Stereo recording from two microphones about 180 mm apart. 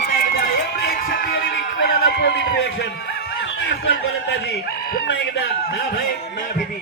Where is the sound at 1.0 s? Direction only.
50° left (ahead or behind); by 4.4 s 70° left (ahead or behind).